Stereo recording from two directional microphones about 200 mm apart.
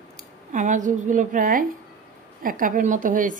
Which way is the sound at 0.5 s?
40° right (ahead or behind).